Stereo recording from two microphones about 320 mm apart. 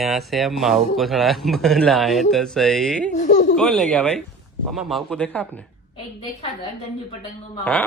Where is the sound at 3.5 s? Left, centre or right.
Centre.